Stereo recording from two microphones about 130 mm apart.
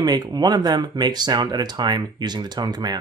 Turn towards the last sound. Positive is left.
turn(degrees=-30)  # may be behind; listen again after turning